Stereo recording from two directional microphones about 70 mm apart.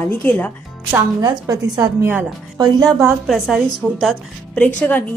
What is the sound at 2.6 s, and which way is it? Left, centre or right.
Speech, right.